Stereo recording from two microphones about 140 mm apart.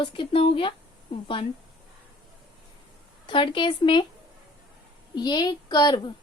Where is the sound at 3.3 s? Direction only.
35° left (ahead or behind).